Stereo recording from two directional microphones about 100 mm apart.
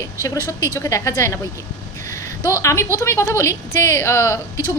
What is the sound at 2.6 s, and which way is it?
A woman's voice, 30° left (ahead or behind).